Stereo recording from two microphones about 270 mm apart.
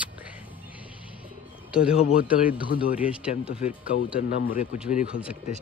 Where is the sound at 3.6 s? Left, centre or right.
Left.